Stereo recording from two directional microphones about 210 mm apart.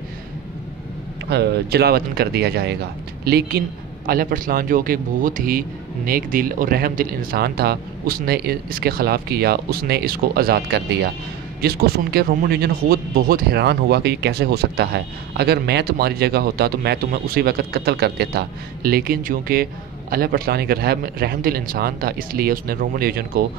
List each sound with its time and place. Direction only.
1.3 s speech: 50° right (ahead or behind)